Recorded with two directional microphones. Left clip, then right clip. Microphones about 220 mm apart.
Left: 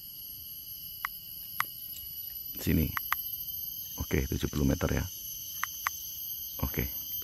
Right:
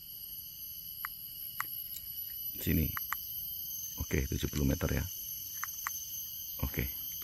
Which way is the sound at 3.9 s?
10° left (ahead or behind).